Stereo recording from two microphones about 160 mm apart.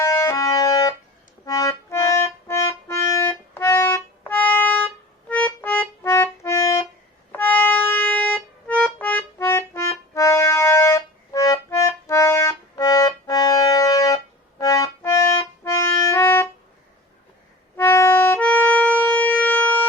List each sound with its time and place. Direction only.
0.0 s music: 20° left (ahead or behind)
5.3 s accordion: 10° left (ahead or behind)
7.3 s music: 10° left (ahead or behind)
14.6 s accordion: 20° left (ahead or behind)
17.7 s music: 15° left (ahead or behind)